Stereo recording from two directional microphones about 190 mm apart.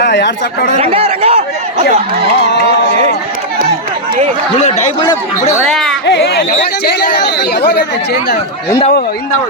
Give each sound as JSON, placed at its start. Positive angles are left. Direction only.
{"t": 0.0, "sound": "speech", "side_deg": 65}
{"t": 0.8, "sound": "speech", "side_deg": -30}
{"t": 5.6, "sound": "music", "side_deg": 0}
{"t": 6.1, "sound": "speech", "side_deg": 60}